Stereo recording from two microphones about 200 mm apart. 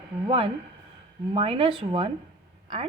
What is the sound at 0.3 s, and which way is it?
Speech, 25° right (ahead or behind).